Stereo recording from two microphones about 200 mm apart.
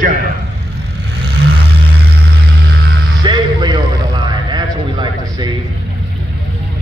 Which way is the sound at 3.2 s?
20° right (ahead or behind).